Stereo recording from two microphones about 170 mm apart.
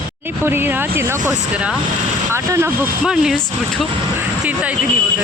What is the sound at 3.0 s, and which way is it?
Speech, 5° right (ahead or behind).